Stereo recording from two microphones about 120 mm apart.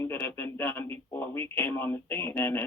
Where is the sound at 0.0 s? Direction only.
20° left (ahead or behind).